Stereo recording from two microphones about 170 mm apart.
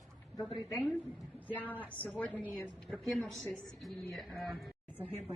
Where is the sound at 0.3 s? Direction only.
20° left (ahead or behind).